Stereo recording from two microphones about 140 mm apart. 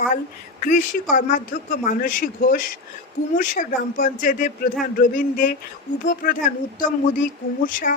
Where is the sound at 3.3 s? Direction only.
70° left (ahead or behind).